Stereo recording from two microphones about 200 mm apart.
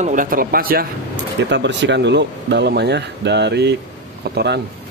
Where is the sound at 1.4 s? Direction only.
60° right (ahead or behind).